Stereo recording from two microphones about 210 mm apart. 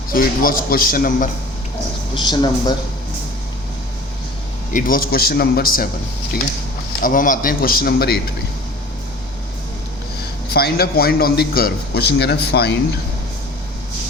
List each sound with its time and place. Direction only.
0.1 s a man's voice: 45° left (ahead or behind)
2.1 s speech: 20° left (ahead or behind)
4.7 s a man's voice: 40° left (ahead or behind)
7.0 s a man's voice: 40° left (ahead or behind)
10.5 s a man's voice: 50° left (ahead or behind)